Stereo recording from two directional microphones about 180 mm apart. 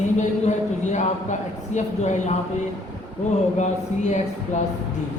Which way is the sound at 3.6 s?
40° left (ahead or behind).